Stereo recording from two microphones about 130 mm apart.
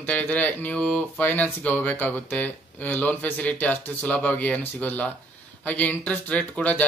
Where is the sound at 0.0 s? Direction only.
10° left (ahead or behind).